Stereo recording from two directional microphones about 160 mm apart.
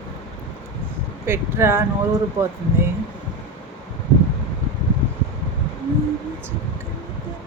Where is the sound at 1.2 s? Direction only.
15° right (ahead or behind).